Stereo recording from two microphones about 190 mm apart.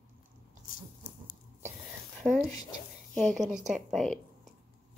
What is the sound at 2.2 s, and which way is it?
Speech, 10° right (ahead or behind).